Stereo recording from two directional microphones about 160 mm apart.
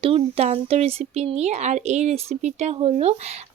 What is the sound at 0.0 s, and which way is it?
Speech, 40° right (ahead or behind).